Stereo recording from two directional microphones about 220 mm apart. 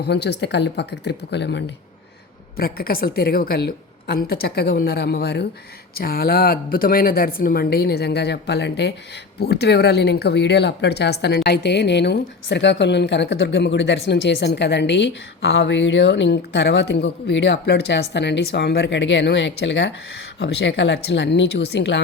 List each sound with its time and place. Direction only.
0.0 s a woman's voice: 50° left (ahead or behind)